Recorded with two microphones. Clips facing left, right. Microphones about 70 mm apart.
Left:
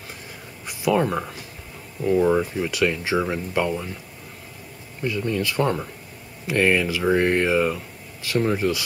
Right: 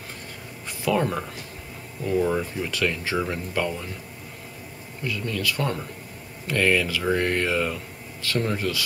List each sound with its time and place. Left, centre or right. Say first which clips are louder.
0.7 s speech: left 3 dB; centre
5.0 s speech: left 4 dB; left